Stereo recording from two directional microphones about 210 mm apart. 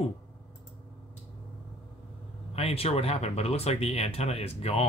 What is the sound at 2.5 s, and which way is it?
Speech, 30° left (ahead or behind).